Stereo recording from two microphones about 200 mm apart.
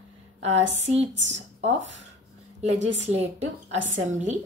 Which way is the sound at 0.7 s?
35° right (ahead or behind).